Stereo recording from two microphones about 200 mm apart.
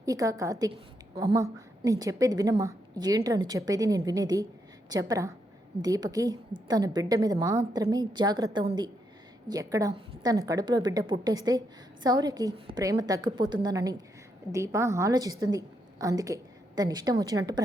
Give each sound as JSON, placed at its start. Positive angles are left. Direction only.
{"t": 0.0, "sound": "a woman's voice", "side_deg": -15}